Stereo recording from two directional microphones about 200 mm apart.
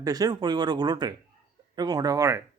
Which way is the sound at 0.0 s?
20° right (ahead or behind).